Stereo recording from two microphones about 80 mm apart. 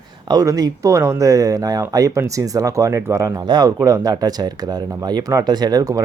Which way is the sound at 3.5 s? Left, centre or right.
Right.